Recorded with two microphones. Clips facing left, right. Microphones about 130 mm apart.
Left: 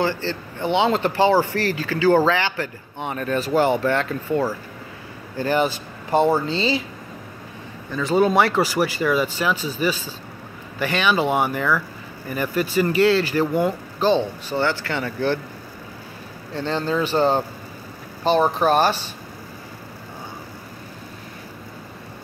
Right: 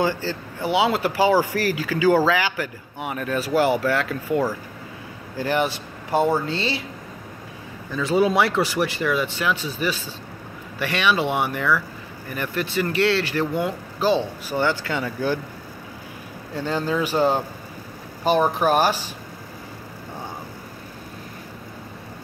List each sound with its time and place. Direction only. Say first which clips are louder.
0.0 s speech: even; 10° right (ahead or behind)
7.9 s speech: left 1 dB; centre (ahead or behind)
16.5 s speech: left 1 dB; 10° right (ahead or behind)